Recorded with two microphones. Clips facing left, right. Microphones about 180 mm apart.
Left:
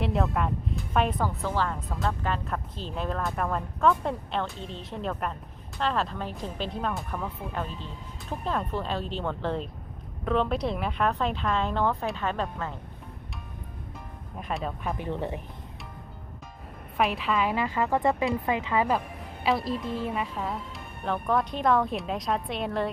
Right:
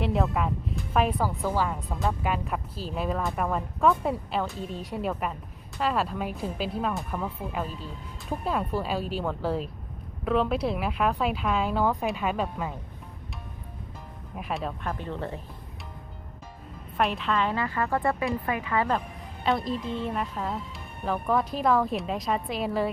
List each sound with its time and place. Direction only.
0.0 s speech: centre (ahead or behind)
14.3 s a woman's voice: centre (ahead or behind)
14.9 s a woman's voice: 15° left (ahead or behind)
17.0 s a woman's voice: centre (ahead or behind)